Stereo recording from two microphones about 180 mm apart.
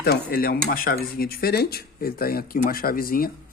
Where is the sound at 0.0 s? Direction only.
55° left (ahead or behind).